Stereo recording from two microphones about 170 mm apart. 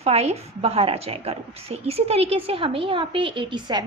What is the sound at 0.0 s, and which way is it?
A woman's voice, 35° right (ahead or behind).